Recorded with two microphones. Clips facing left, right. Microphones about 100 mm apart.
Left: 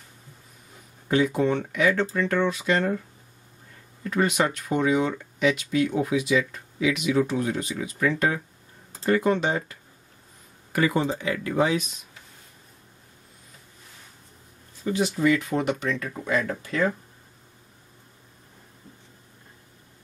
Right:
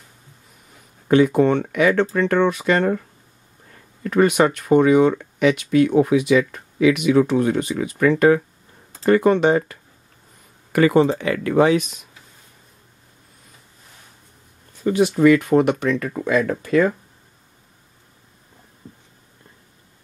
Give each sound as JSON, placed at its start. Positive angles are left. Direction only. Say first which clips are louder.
{"t": 1.0, "sound": "speech", "louder": "right 7 dB", "side_deg": -60}
{"t": 4.0, "sound": "speech", "louder": "right 7 dB", "side_deg": -60}
{"t": 14.8, "sound": "speech", "louder": "right 8 dB", "side_deg": -60}